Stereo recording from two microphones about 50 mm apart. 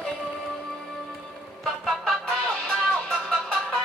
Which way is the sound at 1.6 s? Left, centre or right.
Centre.